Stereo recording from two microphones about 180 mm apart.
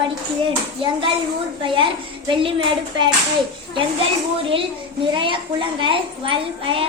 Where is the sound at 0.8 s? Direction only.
30° right (ahead or behind).